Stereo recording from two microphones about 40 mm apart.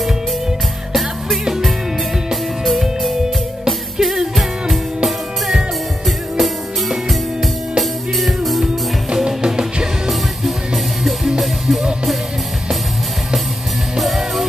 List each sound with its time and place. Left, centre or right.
2.6 s music: centre
8.2 s music: centre
9.1 s music: centre
10.0 s music: centre
13.9 s music: centre